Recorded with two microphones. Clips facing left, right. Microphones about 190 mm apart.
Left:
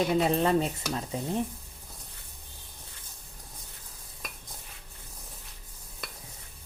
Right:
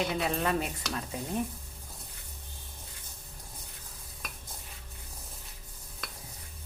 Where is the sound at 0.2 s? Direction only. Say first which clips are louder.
Left 5 dB; 30° left (ahead or behind).